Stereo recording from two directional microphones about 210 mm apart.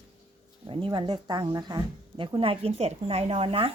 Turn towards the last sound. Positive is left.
turn(degrees=-25)  # may be behind; listen again after turning